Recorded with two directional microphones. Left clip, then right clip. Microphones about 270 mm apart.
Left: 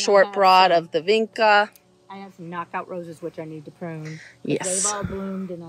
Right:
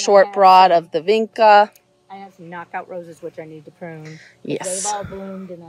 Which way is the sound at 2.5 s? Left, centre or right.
Left.